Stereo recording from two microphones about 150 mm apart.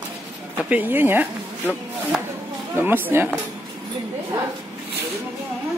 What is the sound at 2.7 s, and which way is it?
Speech, 15° right (ahead or behind).